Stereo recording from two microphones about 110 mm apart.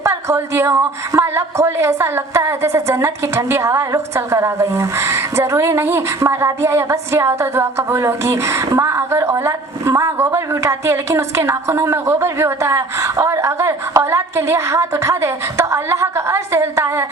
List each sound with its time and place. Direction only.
0.0 s a woman's voice: 25° right (ahead or behind)